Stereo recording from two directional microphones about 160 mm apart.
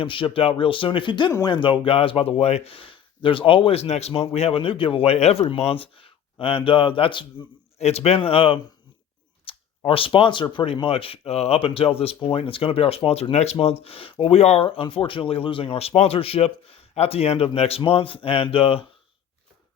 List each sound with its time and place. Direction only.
0.0 s speech: 30° left (ahead or behind)
7.8 s speech: 40° left (ahead or behind)